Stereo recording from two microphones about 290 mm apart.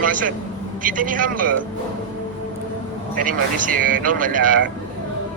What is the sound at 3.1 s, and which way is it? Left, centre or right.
Speech, right.